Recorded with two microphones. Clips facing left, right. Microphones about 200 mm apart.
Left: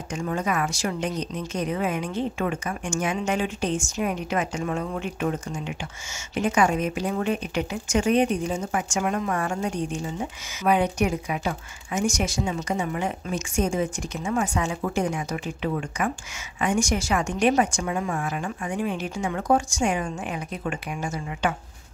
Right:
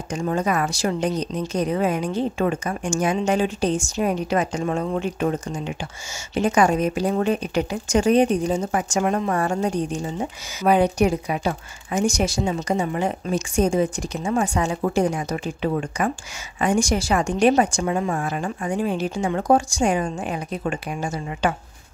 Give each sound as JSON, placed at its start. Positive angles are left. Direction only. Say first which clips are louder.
{"t": 0.1, "sound": "speech", "louder": "right 4 dB", "side_deg": -35}